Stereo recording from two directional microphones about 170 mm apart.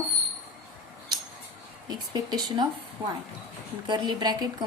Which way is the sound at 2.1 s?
25° right (ahead or behind).